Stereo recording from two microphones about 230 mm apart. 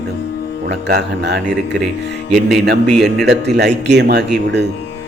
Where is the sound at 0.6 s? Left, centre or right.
Right.